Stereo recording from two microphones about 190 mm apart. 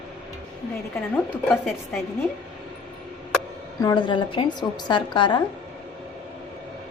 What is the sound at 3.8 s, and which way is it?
A woman's voice, 20° left (ahead or behind).